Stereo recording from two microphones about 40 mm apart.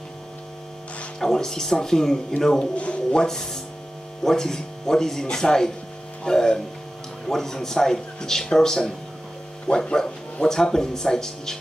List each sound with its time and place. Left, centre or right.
1.2 s speech: centre
2.7 s a man's voice: left
3.3 s speech: centre